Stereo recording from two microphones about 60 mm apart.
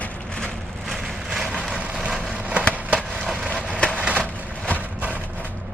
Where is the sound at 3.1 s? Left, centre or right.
Centre.